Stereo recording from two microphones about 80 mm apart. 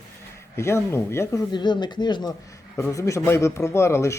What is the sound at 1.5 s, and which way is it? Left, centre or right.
Speech, left.